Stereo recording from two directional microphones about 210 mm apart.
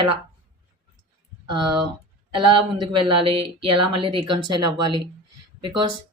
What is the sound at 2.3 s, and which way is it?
Speech, 25° right (ahead or behind).